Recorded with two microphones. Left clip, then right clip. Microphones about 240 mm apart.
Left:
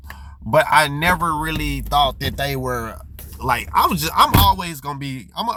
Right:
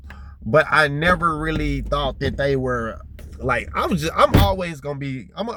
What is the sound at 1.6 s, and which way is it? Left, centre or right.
Speech, centre.